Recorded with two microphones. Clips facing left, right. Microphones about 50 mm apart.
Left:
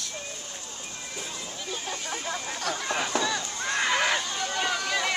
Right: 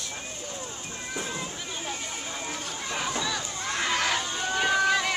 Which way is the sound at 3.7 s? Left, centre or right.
Centre.